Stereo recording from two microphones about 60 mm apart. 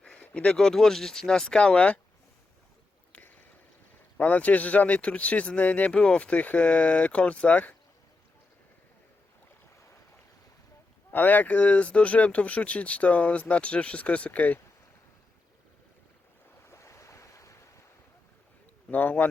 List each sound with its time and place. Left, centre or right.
0.2 s a sound: centre
0.5 s speech: centre
3.1 s rowboat: left
4.2 s speech: left
9.7 s boat: left
11.1 s speech: left
16.6 s waves: left
18.9 s speech: left